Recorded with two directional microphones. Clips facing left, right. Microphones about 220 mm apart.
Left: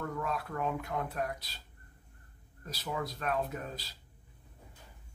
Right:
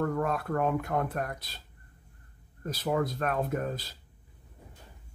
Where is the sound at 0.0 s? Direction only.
50° right (ahead or behind).